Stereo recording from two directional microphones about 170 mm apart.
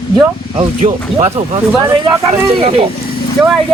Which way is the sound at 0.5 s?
35° right (ahead or behind).